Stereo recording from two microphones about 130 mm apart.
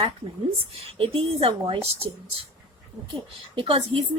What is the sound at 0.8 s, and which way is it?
A woman's voice, 50° right (ahead or behind).